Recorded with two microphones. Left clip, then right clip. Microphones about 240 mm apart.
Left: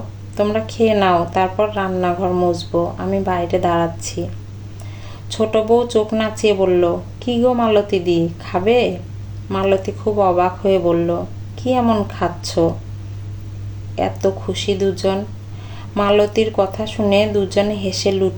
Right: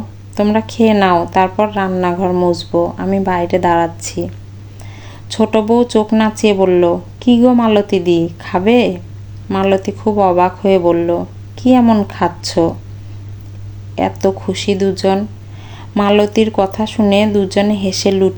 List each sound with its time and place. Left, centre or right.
0.3 s speech: right
5.3 s speech: right
13.9 s speech: right